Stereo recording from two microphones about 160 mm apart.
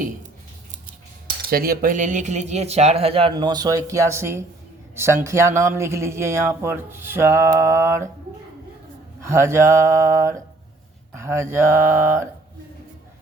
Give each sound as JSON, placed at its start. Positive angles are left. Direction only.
{"t": 1.5, "sound": "speech", "side_deg": -70}
{"t": 9.2, "sound": "speech", "side_deg": -15}